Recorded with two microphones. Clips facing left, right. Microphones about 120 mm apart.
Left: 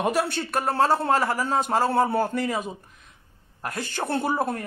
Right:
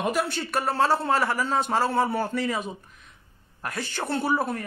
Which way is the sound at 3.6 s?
45° left (ahead or behind).